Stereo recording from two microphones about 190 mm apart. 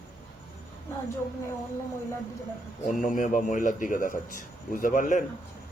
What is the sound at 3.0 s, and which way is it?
Speech, 45° left (ahead or behind).